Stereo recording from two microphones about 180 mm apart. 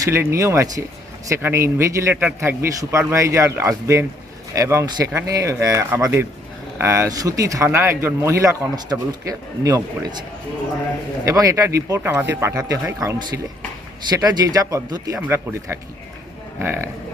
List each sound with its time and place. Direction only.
0.0 s speech: 15° right (ahead or behind)
11.3 s speech: 20° right (ahead or behind)